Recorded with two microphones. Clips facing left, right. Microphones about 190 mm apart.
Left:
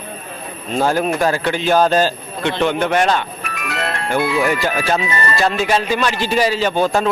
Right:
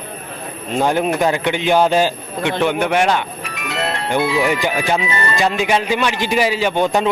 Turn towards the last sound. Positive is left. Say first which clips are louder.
# even
turn(degrees=-20)  # may be behind; listen again after turning